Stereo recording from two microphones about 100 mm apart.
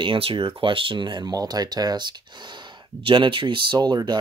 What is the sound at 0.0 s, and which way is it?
Speech, 60° right (ahead or behind).